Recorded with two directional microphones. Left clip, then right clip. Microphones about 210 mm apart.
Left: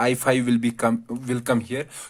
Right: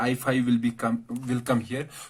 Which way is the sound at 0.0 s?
45° left (ahead or behind).